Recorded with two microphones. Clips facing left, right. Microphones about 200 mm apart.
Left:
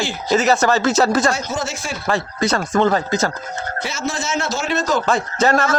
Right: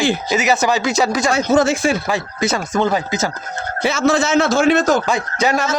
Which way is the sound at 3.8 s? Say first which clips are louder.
Right 11 dB; 65° right (ahead or behind).